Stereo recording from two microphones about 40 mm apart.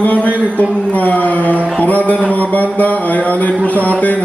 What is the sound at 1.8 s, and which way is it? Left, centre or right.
A man's voice, left.